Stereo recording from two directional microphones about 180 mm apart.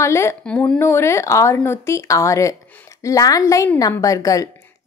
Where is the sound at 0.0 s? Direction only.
15° left (ahead or behind).